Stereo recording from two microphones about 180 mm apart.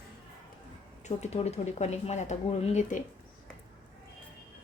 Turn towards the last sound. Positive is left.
turn(degrees=45)  # may be behind; listen again after turning